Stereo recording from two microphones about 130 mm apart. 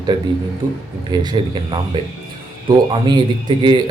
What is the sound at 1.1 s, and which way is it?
Speech, 35° right (ahead or behind).